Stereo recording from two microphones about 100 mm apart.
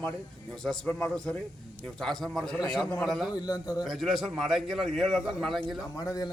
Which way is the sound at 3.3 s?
40° left (ahead or behind).